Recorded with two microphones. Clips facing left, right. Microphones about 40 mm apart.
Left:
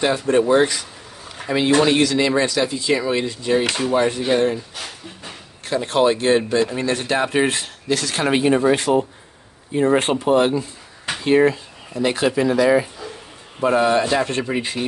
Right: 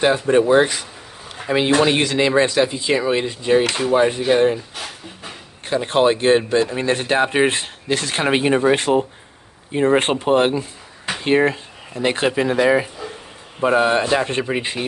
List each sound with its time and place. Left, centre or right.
0.0 s speech: right
4.7 s a sound: centre
5.7 s speech: right